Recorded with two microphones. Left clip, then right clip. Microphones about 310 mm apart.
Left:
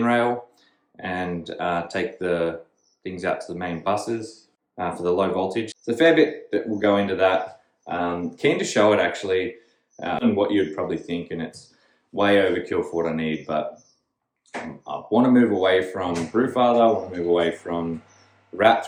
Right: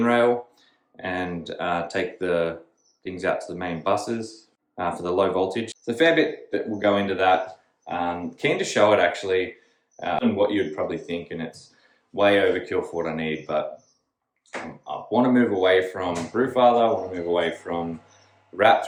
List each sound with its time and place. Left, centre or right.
0.0 s speech: centre
14.8 s speech: centre